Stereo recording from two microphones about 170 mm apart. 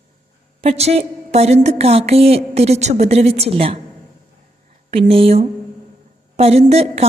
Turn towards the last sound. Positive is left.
turn(degrees=-40)  # may be behind; listen again after turning